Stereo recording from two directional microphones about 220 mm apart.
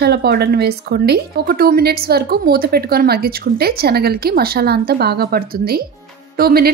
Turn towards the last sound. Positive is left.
turn(degrees=-45)  # may be behind; listen again after turning